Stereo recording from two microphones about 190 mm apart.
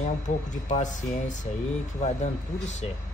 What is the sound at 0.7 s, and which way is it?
Speech, 40° left (ahead or behind).